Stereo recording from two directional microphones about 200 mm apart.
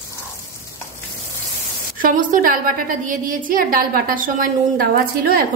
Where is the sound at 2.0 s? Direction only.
40° right (ahead or behind).